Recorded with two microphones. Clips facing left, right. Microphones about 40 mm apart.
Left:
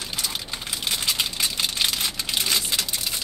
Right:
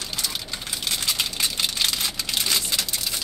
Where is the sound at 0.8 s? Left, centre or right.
Centre.